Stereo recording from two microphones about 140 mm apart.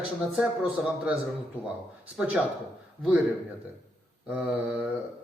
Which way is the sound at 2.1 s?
5° right (ahead or behind).